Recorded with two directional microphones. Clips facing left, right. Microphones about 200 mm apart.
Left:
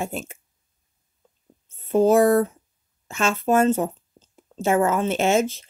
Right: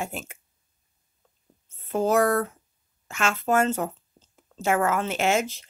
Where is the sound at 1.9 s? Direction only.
25° left (ahead or behind).